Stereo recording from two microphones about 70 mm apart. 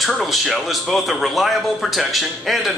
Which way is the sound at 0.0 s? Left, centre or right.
Centre.